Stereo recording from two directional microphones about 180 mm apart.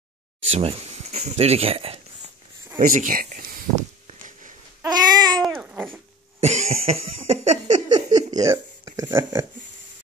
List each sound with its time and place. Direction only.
0.4 s speech: 35° right (ahead or behind)
2.8 s a sound: 50° right (ahead or behind)
4.8 s babbling: 25° right (ahead or behind)
5.4 s babbling: 5° right (ahead or behind)
6.4 s cough: 40° right (ahead or behind)
7.9 s a sound: 25° right (ahead or behind)